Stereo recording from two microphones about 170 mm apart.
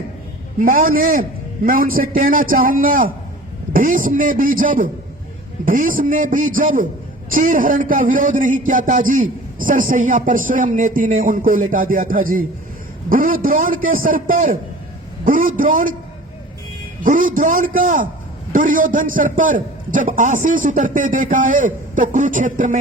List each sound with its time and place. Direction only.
0.6 s a man's voice: 55° right (ahead or behind)
17.0 s a man's voice: 50° right (ahead or behind)